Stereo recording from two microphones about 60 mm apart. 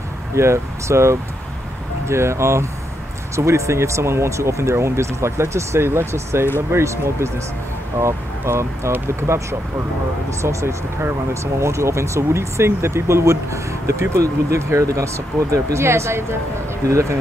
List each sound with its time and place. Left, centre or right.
0.4 s speech: right